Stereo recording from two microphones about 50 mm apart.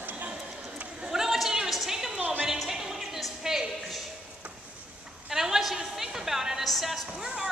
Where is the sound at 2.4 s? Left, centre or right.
Centre.